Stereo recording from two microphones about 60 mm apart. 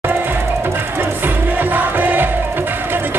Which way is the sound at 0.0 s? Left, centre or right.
Right.